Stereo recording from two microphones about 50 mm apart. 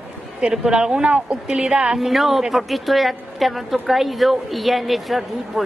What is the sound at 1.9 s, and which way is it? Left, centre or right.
A woman's voice, centre.